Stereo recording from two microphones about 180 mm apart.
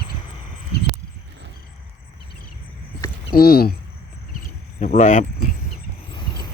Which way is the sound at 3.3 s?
60° left (ahead or behind).